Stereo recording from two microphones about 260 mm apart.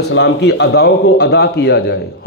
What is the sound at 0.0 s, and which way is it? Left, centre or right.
A man's voice, left.